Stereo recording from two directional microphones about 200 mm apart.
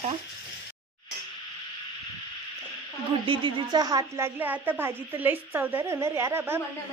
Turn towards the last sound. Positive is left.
turn(degrees=-10)  # may be behind; listen again after turning